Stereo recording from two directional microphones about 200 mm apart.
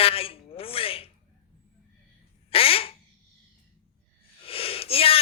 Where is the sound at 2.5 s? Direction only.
30° left (ahead or behind).